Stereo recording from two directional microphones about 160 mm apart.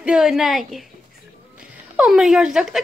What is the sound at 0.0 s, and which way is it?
A woman's voice, 5° right (ahead or behind).